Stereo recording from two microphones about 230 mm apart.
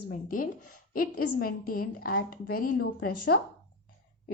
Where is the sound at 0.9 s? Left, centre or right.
Left.